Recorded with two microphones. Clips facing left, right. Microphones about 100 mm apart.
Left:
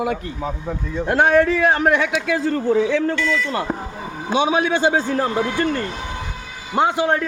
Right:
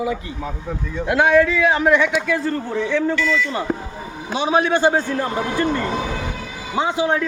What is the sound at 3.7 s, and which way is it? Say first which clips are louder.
Speech: right 2 dB; 5° left (ahead or behind).